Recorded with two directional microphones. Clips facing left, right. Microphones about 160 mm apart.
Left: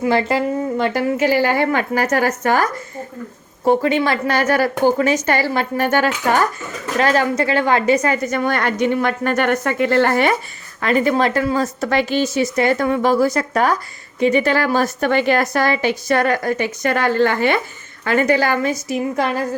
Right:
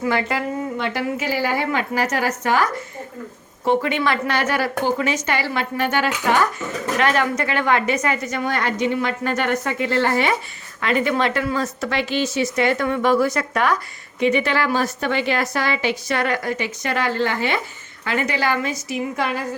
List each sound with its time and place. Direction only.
0.0 s speech: 30° left (ahead or behind)
1.3 s a woman's voice: 65° left (ahead or behind); by 2.6 s 50° left (ahead or behind)
3.6 s a woman's voice: 40° left (ahead or behind)
10.8 s a woman's voice: 40° left (ahead or behind)